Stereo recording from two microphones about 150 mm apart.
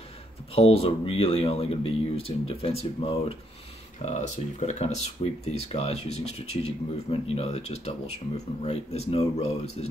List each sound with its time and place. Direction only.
0.6 s speech: 40° left (ahead or behind)
4.0 s speech: 50° left (ahead or behind)